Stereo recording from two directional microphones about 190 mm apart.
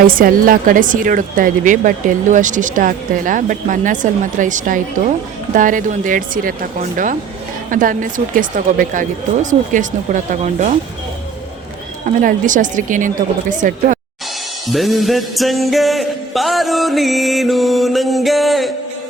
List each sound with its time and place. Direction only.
0.2 s speech: 45° right (ahead or behind)
12.0 s speech: 45° right (ahead or behind)
14.7 s music: centre (ahead or behind)